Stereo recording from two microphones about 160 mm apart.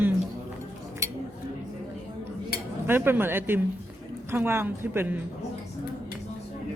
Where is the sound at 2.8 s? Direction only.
15° right (ahead or behind).